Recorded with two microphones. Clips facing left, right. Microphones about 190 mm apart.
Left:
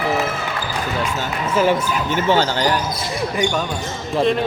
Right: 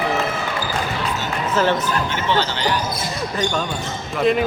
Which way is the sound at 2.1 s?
45° left (ahead or behind).